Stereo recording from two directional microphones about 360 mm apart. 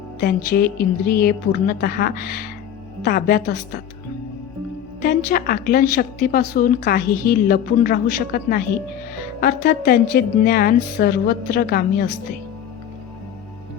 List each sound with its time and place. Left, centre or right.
0.2 s a woman's voice: left
5.0 s a woman's voice: left